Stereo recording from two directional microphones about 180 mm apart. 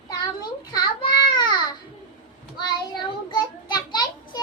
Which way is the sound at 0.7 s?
25° left (ahead or behind).